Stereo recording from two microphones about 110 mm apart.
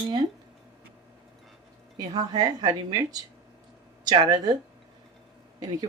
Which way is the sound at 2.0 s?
40° right (ahead or behind).